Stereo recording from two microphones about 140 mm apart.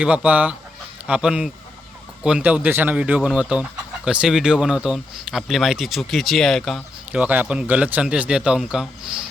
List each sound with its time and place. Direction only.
0.0 s a man's voice: 10° right (ahead or behind)
7.1 s a man's voice: 10° right (ahead or behind)